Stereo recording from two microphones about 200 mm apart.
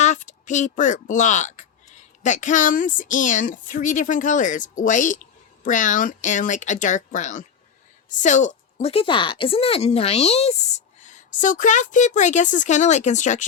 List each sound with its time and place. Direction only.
0.0 s speech: 35° left (ahead or behind)